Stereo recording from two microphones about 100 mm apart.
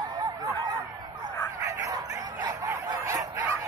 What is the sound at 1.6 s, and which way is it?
Bow-wow, 35° right (ahead or behind).